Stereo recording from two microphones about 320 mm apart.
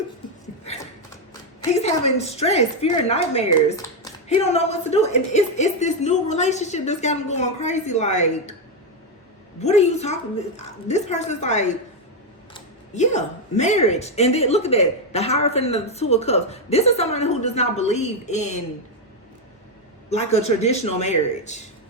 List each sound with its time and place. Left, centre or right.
1.8 s a woman's voice: centre
9.6 s a woman's voice: left
20.1 s a woman's voice: centre